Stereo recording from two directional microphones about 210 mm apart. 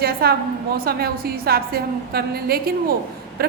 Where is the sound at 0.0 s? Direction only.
50° right (ahead or behind).